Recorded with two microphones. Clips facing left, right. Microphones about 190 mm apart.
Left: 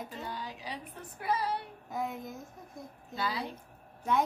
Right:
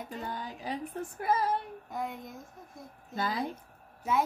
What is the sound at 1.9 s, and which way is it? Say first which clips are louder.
A child's voice: left 3 dB; centre (ahead or behind).